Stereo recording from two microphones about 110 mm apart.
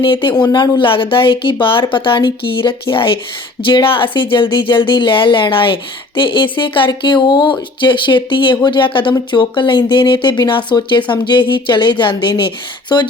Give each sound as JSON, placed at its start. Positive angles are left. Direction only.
{"t": 0.0, "sound": "speech", "side_deg": 45}